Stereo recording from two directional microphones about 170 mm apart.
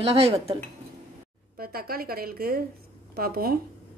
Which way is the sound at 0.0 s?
35° right (ahead or behind).